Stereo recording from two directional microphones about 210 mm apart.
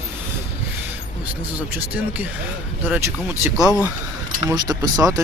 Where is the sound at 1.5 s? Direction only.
5° right (ahead or behind).